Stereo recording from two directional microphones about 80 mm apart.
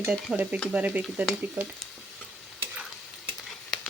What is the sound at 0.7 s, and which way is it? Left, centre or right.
Speech, centre.